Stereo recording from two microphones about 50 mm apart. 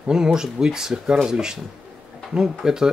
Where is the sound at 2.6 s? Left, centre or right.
Centre.